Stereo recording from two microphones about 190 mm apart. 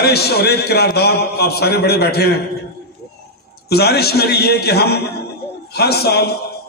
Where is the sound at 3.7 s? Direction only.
55° left (ahead or behind).